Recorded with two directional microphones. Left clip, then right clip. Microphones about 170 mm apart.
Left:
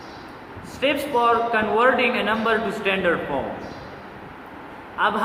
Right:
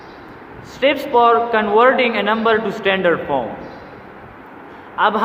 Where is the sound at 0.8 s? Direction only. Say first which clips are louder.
Right 7 dB; 50° right (ahead or behind).